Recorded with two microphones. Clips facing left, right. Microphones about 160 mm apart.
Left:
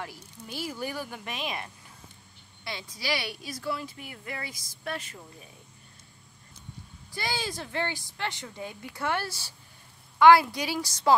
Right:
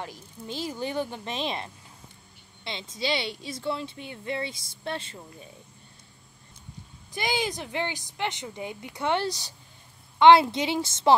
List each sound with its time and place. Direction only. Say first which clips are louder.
0.0 s a woman's voice: right 2 dB; 20° right (ahead or behind)
7.1 s a woman's voice: right 4 dB; 20° right (ahead or behind)